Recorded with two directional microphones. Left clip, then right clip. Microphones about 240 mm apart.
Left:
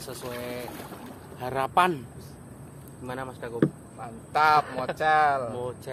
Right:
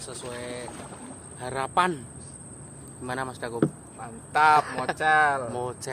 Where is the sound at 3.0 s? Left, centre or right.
Right.